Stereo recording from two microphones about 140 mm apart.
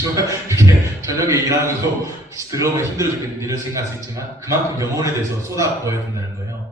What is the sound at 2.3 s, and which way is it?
A man's voice, 20° right (ahead or behind).